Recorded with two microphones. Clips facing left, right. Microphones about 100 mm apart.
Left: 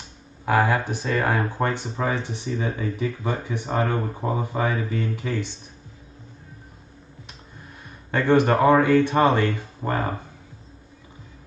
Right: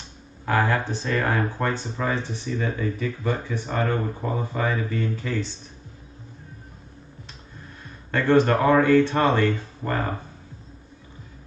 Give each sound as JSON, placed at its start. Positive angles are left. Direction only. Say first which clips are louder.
{"t": 0.5, "sound": "speech", "louder": "left 2 dB", "side_deg": 15}
{"t": 8.1, "sound": "speech", "louder": "even", "side_deg": 15}